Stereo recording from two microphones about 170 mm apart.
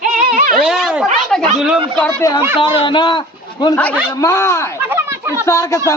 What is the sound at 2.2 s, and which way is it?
Speech, 20° left (ahead or behind).